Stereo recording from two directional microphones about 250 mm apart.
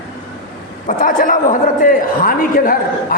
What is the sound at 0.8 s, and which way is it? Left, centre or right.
A man's voice, left.